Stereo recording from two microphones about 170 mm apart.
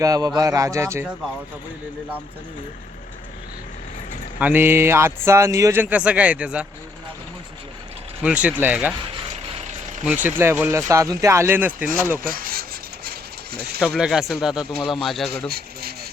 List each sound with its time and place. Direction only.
0.0 s speech: 20° right (ahead or behind)
4.4 s speech: 10° right (ahead or behind)
8.2 s speech: 10° right (ahead or behind)
9.6 s a sound: 45° right (ahead or behind)
10.1 s speech: 10° right (ahead or behind)
12.2 s rub: 55° right (ahead or behind)
13.1 s mechanisms: 70° right (ahead or behind)
13.8 s speech: 5° right (ahead or behind)
15.4 s rub: 65° right (ahead or behind)